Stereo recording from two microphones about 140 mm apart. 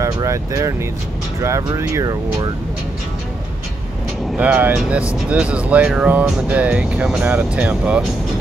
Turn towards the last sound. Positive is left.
turn(degrees=-10)  # may be behind; listen again after turning